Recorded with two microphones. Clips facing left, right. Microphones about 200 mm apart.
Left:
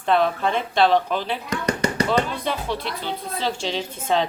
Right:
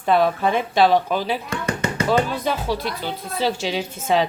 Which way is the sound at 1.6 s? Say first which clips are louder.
Left 3 dB; 35° left (ahead or behind).